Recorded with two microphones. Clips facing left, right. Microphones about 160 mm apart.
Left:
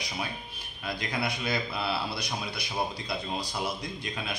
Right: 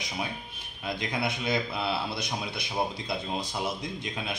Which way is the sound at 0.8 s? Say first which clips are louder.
Right 1 dB; 20° right (ahead or behind).